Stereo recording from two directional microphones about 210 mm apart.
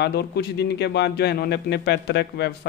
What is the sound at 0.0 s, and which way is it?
Speech, 50° left (ahead or behind).